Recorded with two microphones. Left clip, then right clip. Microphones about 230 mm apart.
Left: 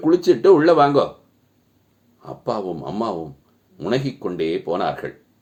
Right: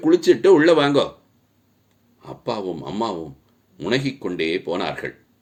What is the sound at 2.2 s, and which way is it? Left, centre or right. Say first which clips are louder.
Speech: left 2 dB; right.